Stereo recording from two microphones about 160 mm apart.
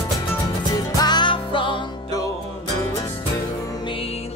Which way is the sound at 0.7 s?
25° left (ahead or behind).